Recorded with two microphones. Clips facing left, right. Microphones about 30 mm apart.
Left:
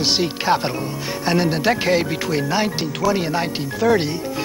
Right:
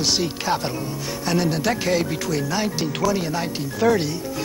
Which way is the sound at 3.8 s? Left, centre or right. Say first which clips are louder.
Left 2 dB; centre.